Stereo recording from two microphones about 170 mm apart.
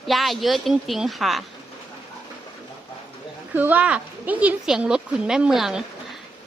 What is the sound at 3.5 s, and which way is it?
Speech, 10° right (ahead or behind).